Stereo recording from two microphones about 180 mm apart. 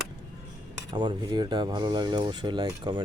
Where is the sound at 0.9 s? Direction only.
25° right (ahead or behind).